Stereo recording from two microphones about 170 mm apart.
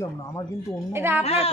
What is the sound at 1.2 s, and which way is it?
Speech, 35° left (ahead or behind).